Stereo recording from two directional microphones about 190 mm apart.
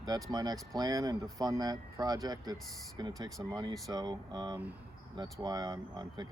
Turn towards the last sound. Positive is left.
turn(degrees=-20)  # may be behind; listen again after turning